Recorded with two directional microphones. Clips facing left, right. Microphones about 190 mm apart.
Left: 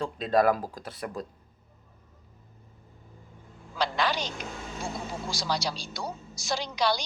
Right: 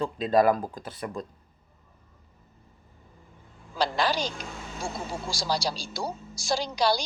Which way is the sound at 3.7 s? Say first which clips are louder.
Right 2 dB; 35° right (ahead or behind).